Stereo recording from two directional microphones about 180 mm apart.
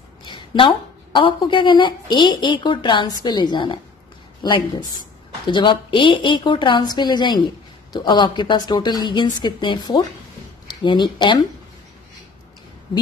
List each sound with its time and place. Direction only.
0.2 s a woman's voice: 25° left (ahead or behind)